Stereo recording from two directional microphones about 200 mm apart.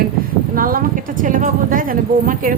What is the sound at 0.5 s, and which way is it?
A woman's voice, 45° right (ahead or behind).